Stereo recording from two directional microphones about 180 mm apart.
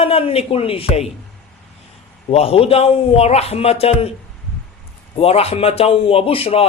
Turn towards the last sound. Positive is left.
turn(degrees=30)  # may be behind; listen again after turning